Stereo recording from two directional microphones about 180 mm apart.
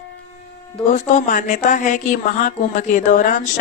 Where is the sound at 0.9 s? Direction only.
45° left (ahead or behind).